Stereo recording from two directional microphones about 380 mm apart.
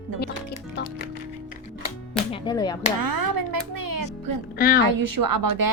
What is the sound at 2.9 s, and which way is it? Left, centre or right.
A woman's voice, right.